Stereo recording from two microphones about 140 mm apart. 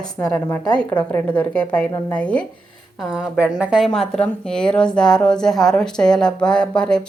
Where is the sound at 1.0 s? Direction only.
10° left (ahead or behind).